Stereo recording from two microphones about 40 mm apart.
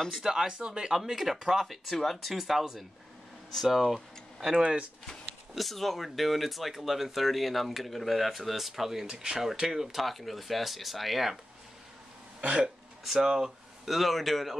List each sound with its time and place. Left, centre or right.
0.2 s speech: centre
0.9 s speech: centre
3.9 s speech: centre
5.5 s speech: centre
9.0 s speech: centre
12.4 s speech: right
13.0 s speech: centre
13.8 s speech: centre